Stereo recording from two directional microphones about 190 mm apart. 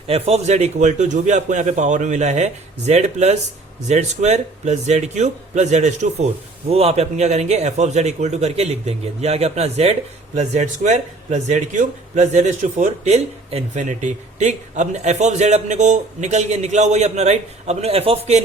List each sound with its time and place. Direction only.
0.1 s a man's voice: 35° right (ahead or behind)